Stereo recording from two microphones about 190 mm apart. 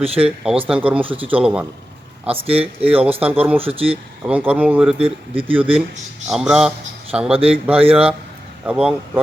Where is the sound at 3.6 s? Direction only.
30° right (ahead or behind).